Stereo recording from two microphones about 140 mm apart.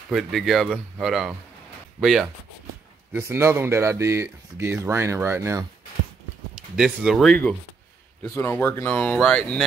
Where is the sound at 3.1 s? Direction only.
15° right (ahead or behind).